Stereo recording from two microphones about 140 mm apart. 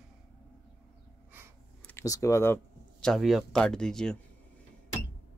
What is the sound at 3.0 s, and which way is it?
Speech, centre (ahead or behind).